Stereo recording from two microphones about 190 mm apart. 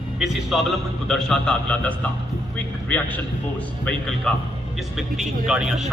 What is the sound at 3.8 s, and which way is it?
A man's voice, 5° left (ahead or behind).